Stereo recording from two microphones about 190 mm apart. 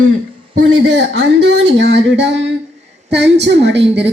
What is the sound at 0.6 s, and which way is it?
A woman's voice, 80° right.